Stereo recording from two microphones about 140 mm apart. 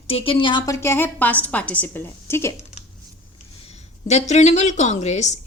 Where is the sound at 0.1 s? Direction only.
40° left (ahead or behind); by 2.5 s 15° left (ahead or behind).